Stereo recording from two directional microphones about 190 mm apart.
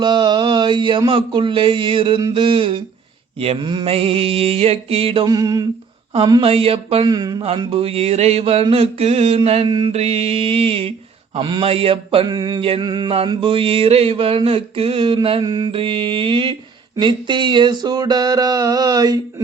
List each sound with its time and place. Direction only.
0.0 s mantra: 25° right (ahead or behind)
6.1 s a sound: 25° right (ahead or behind)
11.3 s mantra: 25° right (ahead or behind)